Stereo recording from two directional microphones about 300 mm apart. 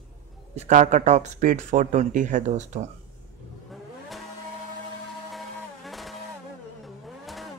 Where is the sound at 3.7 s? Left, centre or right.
Centre.